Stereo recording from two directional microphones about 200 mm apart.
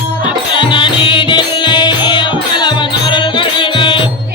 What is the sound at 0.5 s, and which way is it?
Music, 25° left (ahead or behind).